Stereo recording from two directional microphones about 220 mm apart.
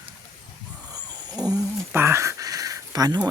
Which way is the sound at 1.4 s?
15° right (ahead or behind).